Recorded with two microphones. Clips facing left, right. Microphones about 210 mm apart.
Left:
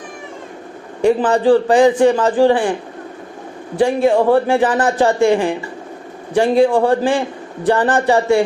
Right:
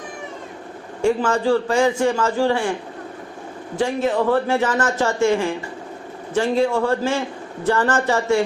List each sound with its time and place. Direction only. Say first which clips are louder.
1.0 s a man's voice: left 5 dB; 15° left (ahead or behind)
3.8 s a man's voice: left 6 dB; 15° left (ahead or behind)
6.6 s a man's voice: left 7 dB; 15° left (ahead or behind)